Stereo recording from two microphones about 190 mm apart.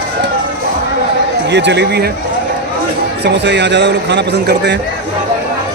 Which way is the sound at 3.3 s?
65° right (ahead or behind).